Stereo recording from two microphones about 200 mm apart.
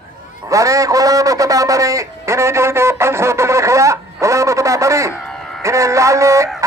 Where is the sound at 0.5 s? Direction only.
15° right (ahead or behind).